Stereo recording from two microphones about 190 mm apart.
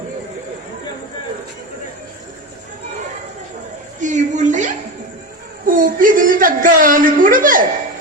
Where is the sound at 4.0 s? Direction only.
40° right (ahead or behind).